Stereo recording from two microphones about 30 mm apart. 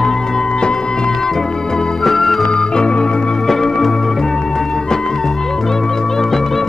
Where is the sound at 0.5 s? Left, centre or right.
Left.